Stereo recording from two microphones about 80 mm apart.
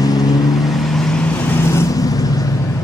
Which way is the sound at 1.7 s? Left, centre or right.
Left.